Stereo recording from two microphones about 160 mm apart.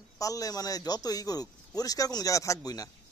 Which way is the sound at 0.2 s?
20° left (ahead or behind).